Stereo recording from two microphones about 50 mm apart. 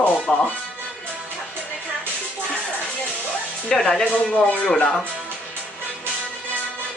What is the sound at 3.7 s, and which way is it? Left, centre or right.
Speech, centre.